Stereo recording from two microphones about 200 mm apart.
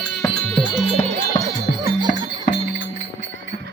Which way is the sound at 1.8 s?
20° right (ahead or behind).